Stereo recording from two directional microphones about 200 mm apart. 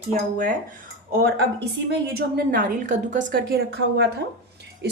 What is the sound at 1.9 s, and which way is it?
A woman's voice, 45° right (ahead or behind).